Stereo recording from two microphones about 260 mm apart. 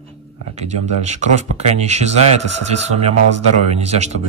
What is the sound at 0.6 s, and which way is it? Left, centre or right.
Speech, right.